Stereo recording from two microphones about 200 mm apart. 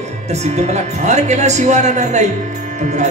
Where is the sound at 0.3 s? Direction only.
35° right (ahead or behind).